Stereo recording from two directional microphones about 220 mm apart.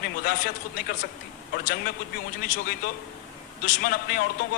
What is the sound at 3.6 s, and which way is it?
Speech, 40° left (ahead or behind).